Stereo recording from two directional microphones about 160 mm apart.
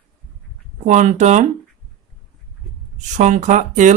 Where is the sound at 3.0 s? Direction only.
45° right (ahead or behind).